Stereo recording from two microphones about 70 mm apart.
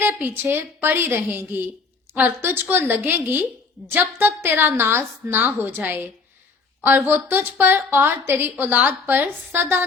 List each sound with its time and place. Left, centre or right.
0.0 s a woman's voice: right